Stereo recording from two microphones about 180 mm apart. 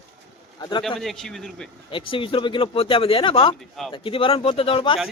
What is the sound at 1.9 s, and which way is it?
Speech, 30° left (ahead or behind).